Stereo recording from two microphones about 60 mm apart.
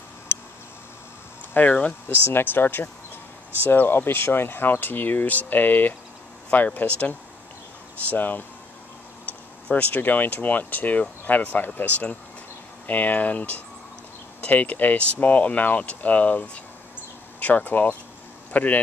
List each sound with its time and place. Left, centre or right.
0.3 s a sound: left
1.5 s speech: left
9.7 s speech: left